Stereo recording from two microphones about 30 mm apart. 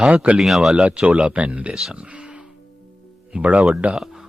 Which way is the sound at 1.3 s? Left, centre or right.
Right.